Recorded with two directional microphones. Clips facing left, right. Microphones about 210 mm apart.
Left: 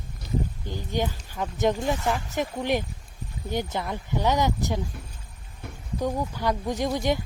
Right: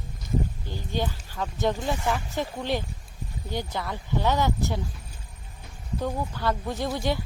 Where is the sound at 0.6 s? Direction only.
15° left (ahead or behind).